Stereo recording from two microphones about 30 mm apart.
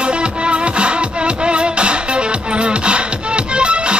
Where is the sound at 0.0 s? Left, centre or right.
Right.